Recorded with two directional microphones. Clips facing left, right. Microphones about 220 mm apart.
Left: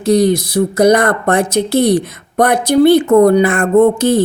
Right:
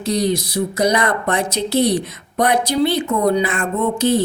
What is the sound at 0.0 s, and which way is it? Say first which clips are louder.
Speech: left 7 dB; 50° left (ahead or behind).